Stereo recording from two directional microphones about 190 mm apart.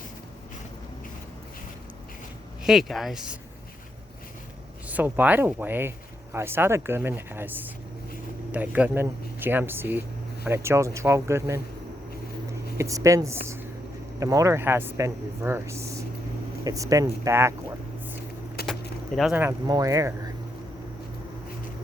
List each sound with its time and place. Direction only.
2.6 s speech: centre (ahead or behind)
4.9 s speech: 10° right (ahead or behind)
12.7 s speech: 15° right (ahead or behind)
18.6 s keys jangling: 55° left (ahead or behind)
19.1 s speech: 5° right (ahead or behind)